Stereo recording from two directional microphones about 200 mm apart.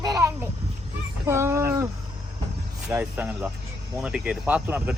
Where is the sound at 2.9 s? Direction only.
10° right (ahead or behind).